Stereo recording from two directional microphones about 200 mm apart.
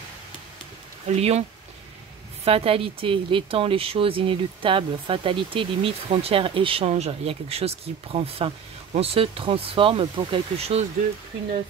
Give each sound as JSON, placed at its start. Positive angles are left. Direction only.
{"t": 1.0, "sound": "speech", "side_deg": -35}
{"t": 2.4, "sound": "speech", "side_deg": -30}